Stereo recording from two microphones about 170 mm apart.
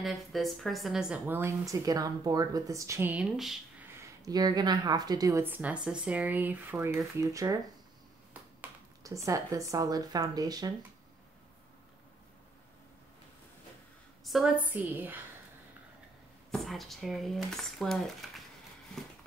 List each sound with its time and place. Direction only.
0.0 s speech: centre (ahead or behind)
4.2 s speech: 25° right (ahead or behind)
9.0 s speech: 20° right (ahead or behind)
14.2 s speech: centre (ahead or behind)
16.5 s speech: centre (ahead or behind)